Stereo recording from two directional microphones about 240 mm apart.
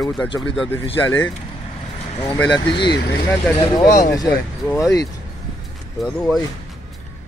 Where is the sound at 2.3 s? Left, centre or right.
Centre.